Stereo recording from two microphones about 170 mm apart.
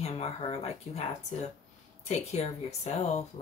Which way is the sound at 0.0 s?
35° left (ahead or behind).